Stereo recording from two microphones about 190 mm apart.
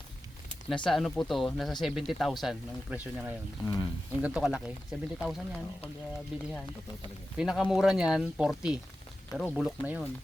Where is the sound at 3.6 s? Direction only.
20° left (ahead or behind).